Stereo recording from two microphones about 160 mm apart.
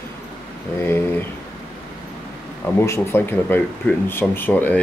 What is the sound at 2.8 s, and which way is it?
Speech, 15° left (ahead or behind).